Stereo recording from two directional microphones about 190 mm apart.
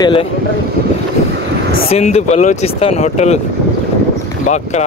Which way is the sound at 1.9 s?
35° left (ahead or behind).